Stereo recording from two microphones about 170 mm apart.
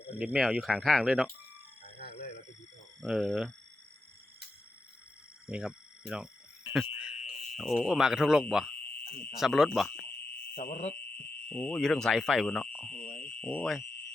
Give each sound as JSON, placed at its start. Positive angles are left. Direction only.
{"t": 0.2, "sound": "speech", "side_deg": -5}
{"t": 3.0, "sound": "speech", "side_deg": 0}
{"t": 5.5, "sound": "cricket", "side_deg": -5}
{"t": 7.0, "sound": "speech", "side_deg": -5}
{"t": 9.0, "sound": "speech", "side_deg": 60}
{"t": 9.4, "sound": "speech", "side_deg": 0}
{"t": 10.5, "sound": "speech", "side_deg": 55}
{"t": 11.4, "sound": "speech", "side_deg": 5}
{"t": 12.9, "sound": "fire alarm", "side_deg": 55}
{"t": 13.2, "sound": "speech", "side_deg": 10}